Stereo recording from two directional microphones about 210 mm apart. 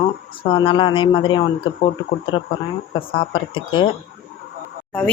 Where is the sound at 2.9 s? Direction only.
25° left (ahead or behind).